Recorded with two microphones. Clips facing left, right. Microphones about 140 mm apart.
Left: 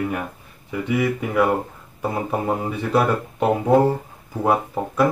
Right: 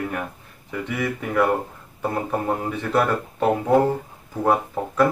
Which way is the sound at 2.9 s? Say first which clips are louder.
Left 2 dB; 10° left (ahead or behind).